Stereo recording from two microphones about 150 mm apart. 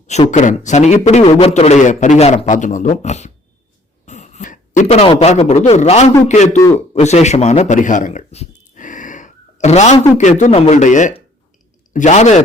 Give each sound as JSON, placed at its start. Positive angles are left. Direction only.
{"t": 0.1, "sound": "a man's voice", "side_deg": 50}